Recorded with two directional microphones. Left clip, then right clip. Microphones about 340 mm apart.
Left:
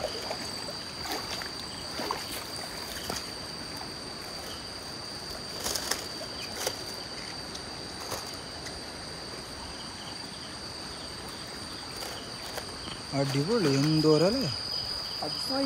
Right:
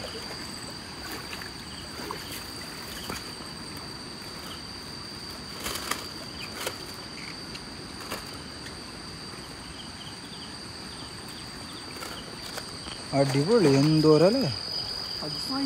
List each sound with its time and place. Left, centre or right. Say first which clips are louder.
13.1 s speech: right 6 dB; centre